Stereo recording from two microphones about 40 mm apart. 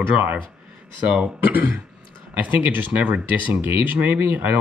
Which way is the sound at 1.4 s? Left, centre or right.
Right.